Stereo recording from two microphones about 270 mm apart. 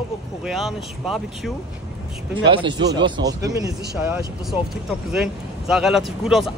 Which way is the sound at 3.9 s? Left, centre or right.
Centre.